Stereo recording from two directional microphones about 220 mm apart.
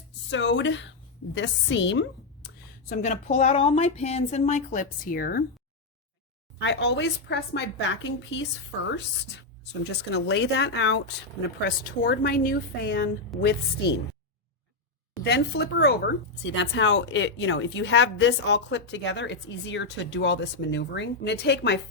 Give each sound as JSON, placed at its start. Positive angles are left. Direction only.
{"t": 0.3, "sound": "a woman's voice", "side_deg": 55}
{"t": 2.9, "sound": "speech", "side_deg": 35}
{"t": 6.6, "sound": "speech", "side_deg": 50}
{"t": 10.1, "sound": "speech", "side_deg": 50}
{"t": 15.2, "sound": "speech", "side_deg": 50}